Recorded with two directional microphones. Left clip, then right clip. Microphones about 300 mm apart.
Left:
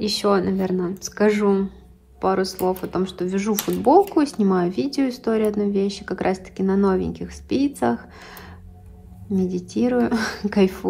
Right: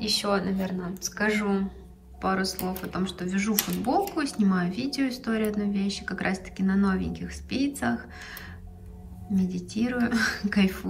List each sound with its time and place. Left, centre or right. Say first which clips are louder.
0.0 s speech: left 6 dB; left